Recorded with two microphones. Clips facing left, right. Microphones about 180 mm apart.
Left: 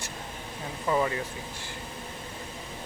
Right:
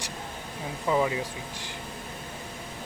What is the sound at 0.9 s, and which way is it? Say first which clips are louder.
Speech: right 1 dB; 15° right (ahead or behind).